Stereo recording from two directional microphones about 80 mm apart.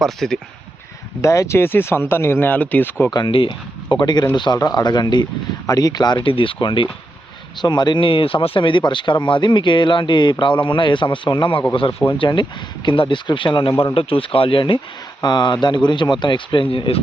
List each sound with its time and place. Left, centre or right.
0.0 s speech: centre
1.2 s speech: left
3.1 s speech: left
5.6 s speech: left
7.6 s speech: left
15.2 s speech: left
16.2 s speech: left